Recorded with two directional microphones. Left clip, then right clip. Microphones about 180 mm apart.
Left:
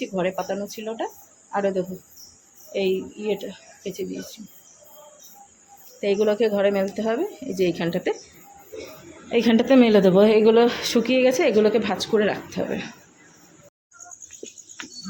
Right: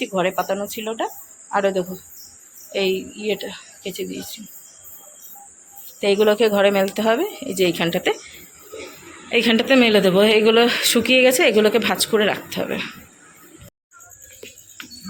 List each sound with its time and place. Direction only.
0.0 s speech: 25° right (ahead or behind)
2.7 s speech: 10° right (ahead or behind)
6.0 s speech: 15° right (ahead or behind)
9.3 s speech: 20° left (ahead or behind)